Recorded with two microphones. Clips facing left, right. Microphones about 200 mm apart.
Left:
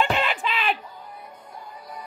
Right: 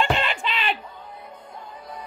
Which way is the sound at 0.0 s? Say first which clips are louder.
Even; 5° left (ahead or behind).